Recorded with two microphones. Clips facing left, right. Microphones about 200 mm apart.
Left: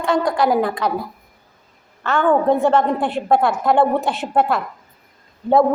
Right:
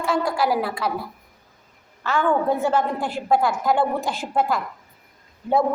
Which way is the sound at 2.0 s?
60° left (ahead or behind).